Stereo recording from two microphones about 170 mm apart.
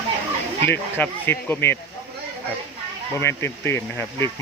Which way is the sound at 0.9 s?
10° left (ahead or behind).